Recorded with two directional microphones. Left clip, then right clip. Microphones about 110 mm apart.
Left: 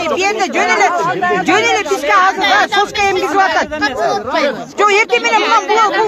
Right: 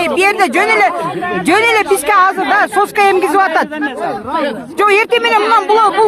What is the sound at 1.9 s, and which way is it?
Speech, 80° right.